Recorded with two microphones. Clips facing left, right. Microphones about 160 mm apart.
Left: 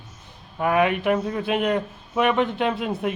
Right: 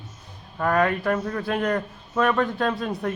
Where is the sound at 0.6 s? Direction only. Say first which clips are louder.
Left 1 dB; 10° left (ahead or behind).